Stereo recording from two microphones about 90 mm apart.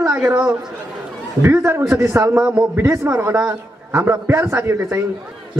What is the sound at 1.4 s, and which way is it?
A man's voice, 25° right (ahead or behind).